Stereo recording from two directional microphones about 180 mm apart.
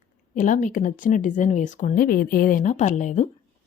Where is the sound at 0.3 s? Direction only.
45° left (ahead or behind).